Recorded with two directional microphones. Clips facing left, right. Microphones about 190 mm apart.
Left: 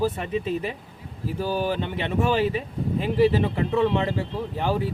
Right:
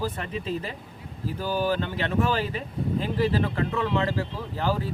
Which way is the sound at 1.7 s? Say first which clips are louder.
Even; 20° left (ahead or behind).